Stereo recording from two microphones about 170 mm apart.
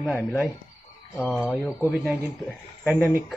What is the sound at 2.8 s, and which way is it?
Speech, 5° right (ahead or behind).